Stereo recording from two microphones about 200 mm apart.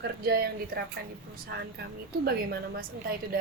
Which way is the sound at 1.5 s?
55° right (ahead or behind).